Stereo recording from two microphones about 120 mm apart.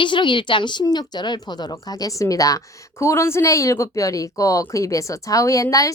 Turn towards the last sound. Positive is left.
turn(degrees=30)  # may be behind; listen again after turning